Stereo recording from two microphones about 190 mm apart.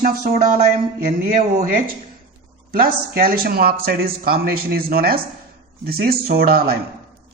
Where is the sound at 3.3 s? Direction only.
50° right (ahead or behind).